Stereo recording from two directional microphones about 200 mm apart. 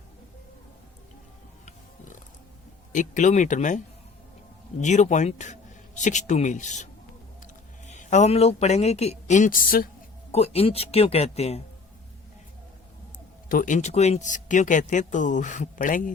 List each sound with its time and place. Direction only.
2.9 s speech: 40° left (ahead or behind)
7.9 s speech: 35° left (ahead or behind)
10.3 s speech: 30° left (ahead or behind)
13.5 s speech: 40° left (ahead or behind)